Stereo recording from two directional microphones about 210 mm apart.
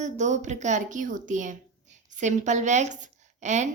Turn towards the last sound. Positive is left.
turn(degrees=-35)  # may be behind; listen again after turning